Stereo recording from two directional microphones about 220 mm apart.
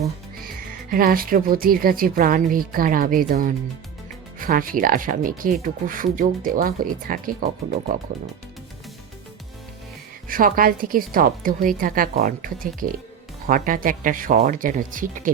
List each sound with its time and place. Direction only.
0.0 s a woman's voice: 40° right (ahead or behind)
10.2 s a woman's voice: 40° right (ahead or behind)